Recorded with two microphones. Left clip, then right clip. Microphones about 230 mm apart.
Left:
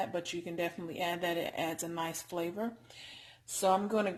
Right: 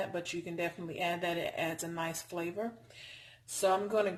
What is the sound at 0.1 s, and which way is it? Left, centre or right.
Speech, left.